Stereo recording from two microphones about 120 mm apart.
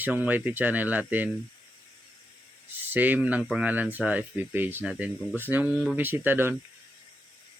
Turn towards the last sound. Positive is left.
turn(degrees=-20)  # may be behind; listen again after turning